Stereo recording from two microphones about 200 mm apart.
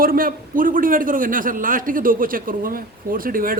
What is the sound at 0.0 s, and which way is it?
Speech, 45° right (ahead or behind).